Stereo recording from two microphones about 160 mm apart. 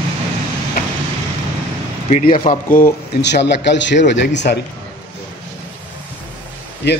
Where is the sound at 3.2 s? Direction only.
90° left.